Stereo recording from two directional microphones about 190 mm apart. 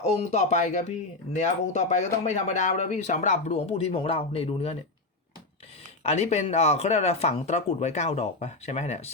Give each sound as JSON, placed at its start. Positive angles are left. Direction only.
{"t": 0.0, "sound": "speech", "side_deg": 35}
{"t": 6.0, "sound": "speech", "side_deg": 35}